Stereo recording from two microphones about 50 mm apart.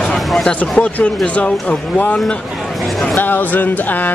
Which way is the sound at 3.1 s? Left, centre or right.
Left.